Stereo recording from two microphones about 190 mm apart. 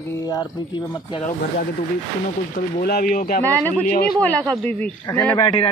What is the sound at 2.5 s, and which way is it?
Speech, 50° left (ahead or behind).